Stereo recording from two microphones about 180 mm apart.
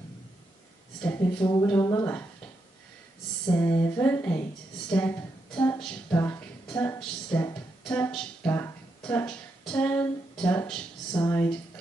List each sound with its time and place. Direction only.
1.0 s speech: 15° left (ahead or behind)
3.4 s female singing: 20° left (ahead or behind)
4.0 s a woman's voice: 10° left (ahead or behind)